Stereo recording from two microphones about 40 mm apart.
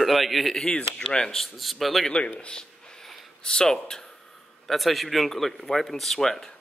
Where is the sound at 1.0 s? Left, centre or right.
Left.